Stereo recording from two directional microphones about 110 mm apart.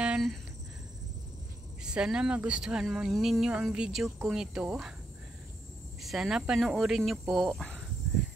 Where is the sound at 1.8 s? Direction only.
10° right (ahead or behind).